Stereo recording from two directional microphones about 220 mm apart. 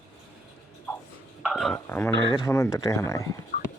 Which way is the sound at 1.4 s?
Centre (ahead or behind).